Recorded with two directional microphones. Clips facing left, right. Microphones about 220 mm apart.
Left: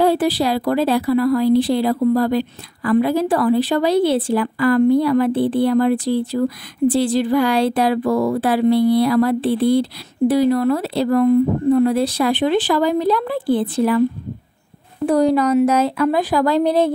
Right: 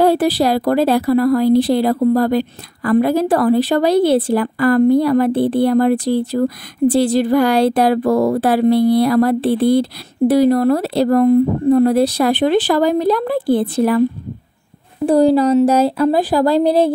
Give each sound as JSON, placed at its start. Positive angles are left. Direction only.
{"t": 0.0, "sound": "speech", "side_deg": -40}
{"t": 15.0, "sound": "speech", "side_deg": -30}